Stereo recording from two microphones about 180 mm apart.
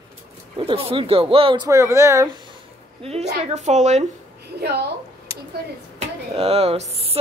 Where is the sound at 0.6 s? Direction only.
30° right (ahead or behind).